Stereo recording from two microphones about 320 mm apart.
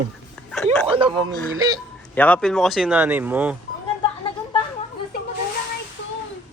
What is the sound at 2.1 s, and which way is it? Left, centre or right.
Speech, centre.